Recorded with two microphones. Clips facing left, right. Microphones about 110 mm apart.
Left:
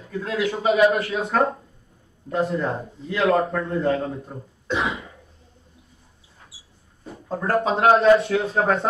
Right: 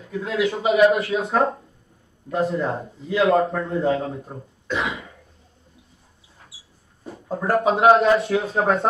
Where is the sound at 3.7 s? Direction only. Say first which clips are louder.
Right 1 dB; 20° right (ahead or behind).